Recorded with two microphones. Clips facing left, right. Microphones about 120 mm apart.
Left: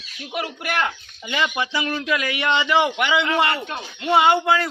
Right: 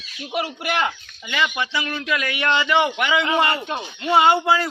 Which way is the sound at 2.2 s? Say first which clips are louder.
Even; 5° left (ahead or behind).